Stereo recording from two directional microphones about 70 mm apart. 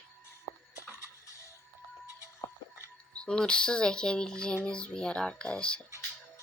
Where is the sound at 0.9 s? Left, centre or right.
Left.